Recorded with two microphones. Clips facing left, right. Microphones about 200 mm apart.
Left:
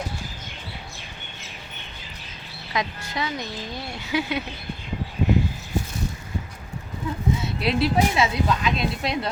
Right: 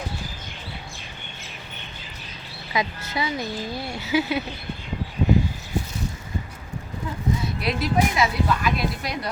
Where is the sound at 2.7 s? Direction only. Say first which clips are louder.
Right 2 dB; 5° right (ahead or behind).